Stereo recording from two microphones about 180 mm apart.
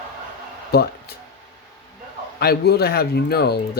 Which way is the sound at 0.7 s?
60° left (ahead or behind).